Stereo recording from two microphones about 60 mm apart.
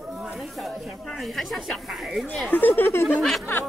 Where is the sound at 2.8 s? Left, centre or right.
Left.